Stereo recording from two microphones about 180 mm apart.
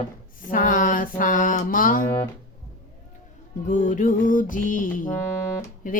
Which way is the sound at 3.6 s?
45° left (ahead or behind).